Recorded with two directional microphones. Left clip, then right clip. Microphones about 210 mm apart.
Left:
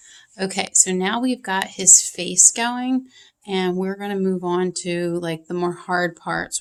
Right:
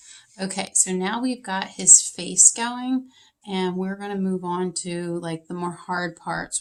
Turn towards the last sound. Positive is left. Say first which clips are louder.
# left 3 dB
turn(degrees=35)  # may be behind; listen again after turning